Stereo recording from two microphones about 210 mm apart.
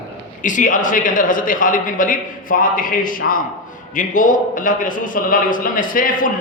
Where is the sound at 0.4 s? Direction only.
40° left (ahead or behind).